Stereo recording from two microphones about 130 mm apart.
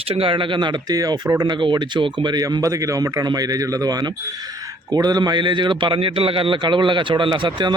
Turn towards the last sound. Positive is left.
turn(degrees=-35)  # may be behind; listen again after turning